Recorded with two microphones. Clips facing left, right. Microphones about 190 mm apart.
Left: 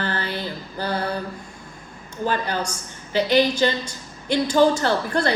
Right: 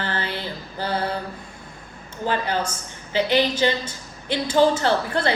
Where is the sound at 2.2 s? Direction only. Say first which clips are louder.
Even; 20° right (ahead or behind).